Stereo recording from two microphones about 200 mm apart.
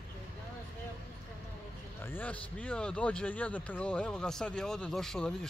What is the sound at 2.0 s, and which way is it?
Speech, 10° left (ahead or behind).